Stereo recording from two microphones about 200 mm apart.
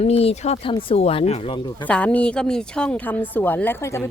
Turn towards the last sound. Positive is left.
turn(degrees=10)  # may be behind; listen again after turning